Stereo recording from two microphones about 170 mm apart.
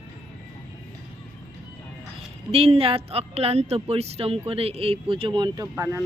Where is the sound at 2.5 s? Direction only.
35° right (ahead or behind).